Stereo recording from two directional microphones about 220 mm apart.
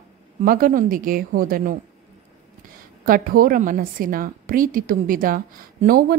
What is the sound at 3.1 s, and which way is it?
A woman's voice, 40° right (ahead or behind).